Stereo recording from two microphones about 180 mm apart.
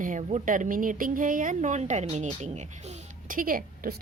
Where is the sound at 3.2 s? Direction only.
50° right (ahead or behind).